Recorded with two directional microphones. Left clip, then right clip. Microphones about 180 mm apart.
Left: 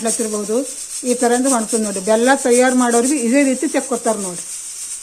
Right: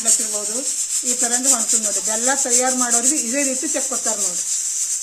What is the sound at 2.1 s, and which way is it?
Speech, 55° left (ahead or behind).